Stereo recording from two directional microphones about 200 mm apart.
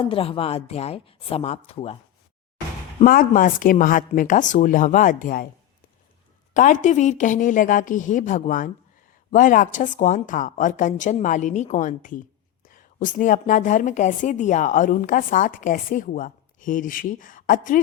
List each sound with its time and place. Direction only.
0.0 s speech: 30° left (ahead or behind)
3.0 s speech: 45° left (ahead or behind)
6.5 s a woman's voice: 40° left (ahead or behind)